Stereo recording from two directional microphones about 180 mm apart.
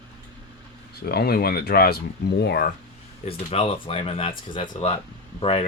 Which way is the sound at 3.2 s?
30° left (ahead or behind).